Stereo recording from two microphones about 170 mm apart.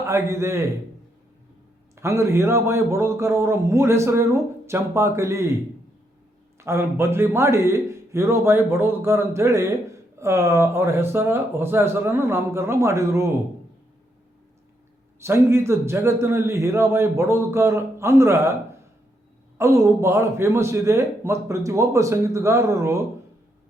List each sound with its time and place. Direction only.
0.0 s a man's voice: 15° right (ahead or behind)
2.0 s a man's voice: 15° right (ahead or behind)
6.6 s a man's voice: 15° right (ahead or behind)
15.2 s a man's voice: 15° right (ahead or behind)